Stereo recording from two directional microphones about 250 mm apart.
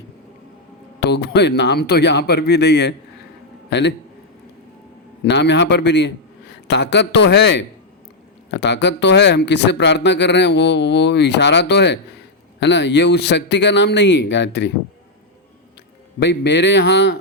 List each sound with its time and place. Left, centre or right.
0.9 s a man's voice: left
5.2 s speech: left
16.2 s speech: left